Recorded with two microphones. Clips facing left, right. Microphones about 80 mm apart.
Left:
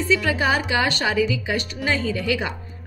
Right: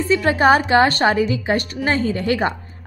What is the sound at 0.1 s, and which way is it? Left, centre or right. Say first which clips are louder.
A woman's voice: right 7 dB; right.